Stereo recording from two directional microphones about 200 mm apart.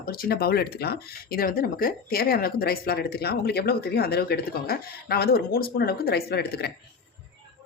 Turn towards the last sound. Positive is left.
turn(degrees=50)  # may be behind; listen again after turning